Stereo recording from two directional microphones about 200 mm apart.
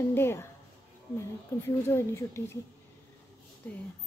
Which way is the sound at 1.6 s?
15° left (ahead or behind).